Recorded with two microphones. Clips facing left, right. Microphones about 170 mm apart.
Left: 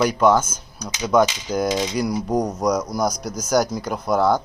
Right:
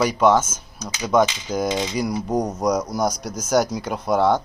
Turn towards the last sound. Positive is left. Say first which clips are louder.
# even
turn(degrees=-10)  # may be behind; listen again after turning